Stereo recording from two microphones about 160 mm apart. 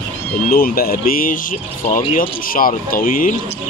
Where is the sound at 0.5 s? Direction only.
70° left (ahead or behind).